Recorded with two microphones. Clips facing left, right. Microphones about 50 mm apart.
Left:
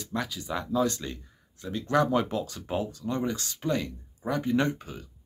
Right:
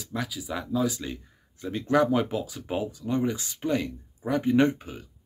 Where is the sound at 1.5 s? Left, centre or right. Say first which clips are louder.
Right 2 dB; right.